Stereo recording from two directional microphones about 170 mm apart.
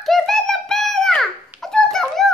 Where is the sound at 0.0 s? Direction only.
Centre (ahead or behind).